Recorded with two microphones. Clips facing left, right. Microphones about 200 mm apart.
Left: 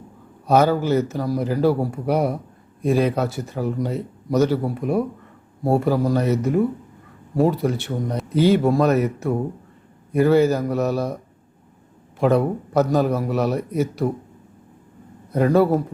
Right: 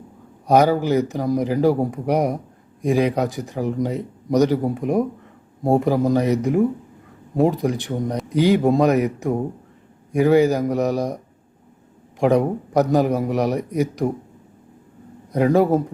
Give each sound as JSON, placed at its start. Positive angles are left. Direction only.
{"t": 0.4, "sound": "speech", "side_deg": -15}
{"t": 12.2, "sound": "speech", "side_deg": -15}
{"t": 15.3, "sound": "speech", "side_deg": -15}